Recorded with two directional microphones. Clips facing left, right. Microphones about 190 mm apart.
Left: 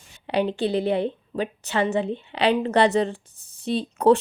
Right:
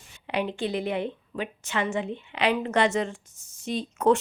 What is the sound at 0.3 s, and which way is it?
A woman's voice, 35° left (ahead or behind).